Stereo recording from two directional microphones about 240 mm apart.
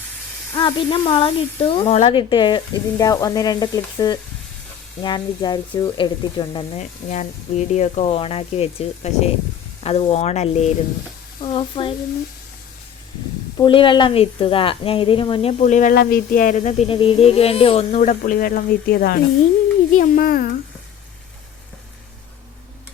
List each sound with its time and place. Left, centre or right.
0.5 s a woman's voice: centre
3.0 s frying: centre
5.0 s a woman's voice: centre
7.1 s a woman's voice: left
13.6 s a woman's voice: left